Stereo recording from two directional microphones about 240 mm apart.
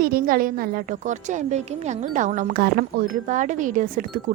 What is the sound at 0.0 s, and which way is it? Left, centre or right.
A woman's voice, right.